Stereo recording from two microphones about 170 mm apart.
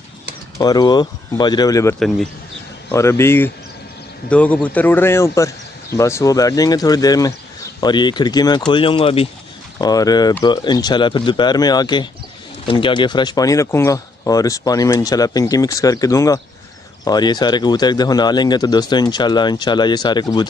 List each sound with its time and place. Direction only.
0.6 s speech: 20° left (ahead or behind)
2.0 s a man's voice: centre (ahead or behind)
2.9 s speech: 15° left (ahead or behind); by 9.3 s 35° left (ahead or behind)
9.8 s speech: 20° left (ahead or behind)